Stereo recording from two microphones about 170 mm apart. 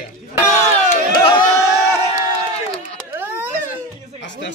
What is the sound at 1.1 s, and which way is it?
Crowd, 25° left (ahead or behind).